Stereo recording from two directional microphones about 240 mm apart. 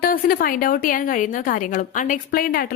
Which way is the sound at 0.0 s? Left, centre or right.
Left.